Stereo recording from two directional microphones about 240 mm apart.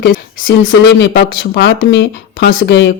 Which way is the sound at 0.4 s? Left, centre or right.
Left.